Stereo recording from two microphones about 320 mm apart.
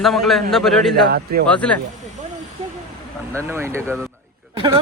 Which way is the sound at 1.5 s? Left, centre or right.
Centre.